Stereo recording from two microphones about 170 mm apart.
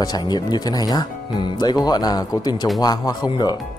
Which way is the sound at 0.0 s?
25° left (ahead or behind).